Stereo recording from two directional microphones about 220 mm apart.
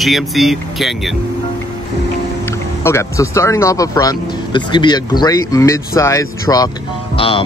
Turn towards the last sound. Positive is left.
turn(degrees=25)  # may be behind; listen again after turning